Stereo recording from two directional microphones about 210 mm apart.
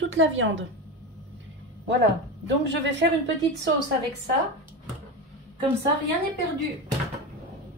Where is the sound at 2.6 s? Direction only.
55° right (ahead or behind).